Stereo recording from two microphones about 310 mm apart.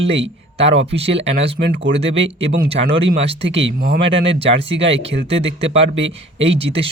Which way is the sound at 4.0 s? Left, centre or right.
Centre.